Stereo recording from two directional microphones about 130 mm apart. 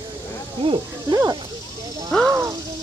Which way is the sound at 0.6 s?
40° right (ahead or behind).